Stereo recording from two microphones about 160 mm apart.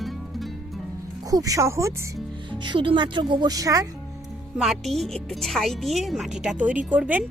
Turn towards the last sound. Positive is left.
turn(degrees=-10)  # may be behind; listen again after turning